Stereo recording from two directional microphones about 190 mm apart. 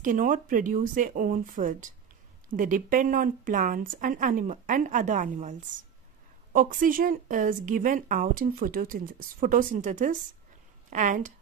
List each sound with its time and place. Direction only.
0.0 s a woman's voice: 45° right (ahead or behind)